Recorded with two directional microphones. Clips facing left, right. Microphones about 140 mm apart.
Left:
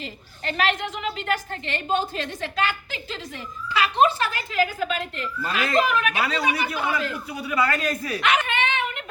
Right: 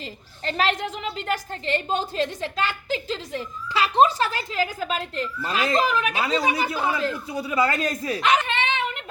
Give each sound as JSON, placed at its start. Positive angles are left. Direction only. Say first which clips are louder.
{"t": 0.0, "sound": "a woman's voice", "louder": "right 1 dB", "side_deg": -30}